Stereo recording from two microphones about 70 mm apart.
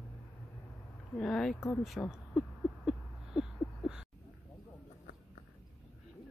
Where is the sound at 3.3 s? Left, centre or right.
Centre.